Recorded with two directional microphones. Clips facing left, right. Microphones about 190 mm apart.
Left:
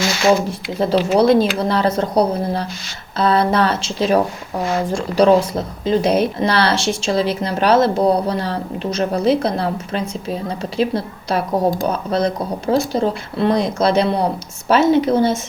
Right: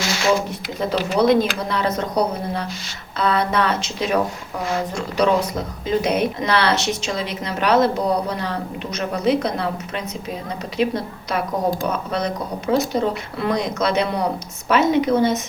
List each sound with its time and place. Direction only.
0.8 s speech: 30° left (ahead or behind)